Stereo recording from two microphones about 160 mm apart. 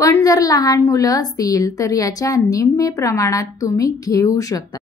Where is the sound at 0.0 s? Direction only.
20° left (ahead or behind).